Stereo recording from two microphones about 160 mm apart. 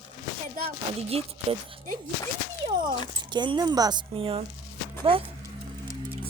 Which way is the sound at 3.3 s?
30° right (ahead or behind).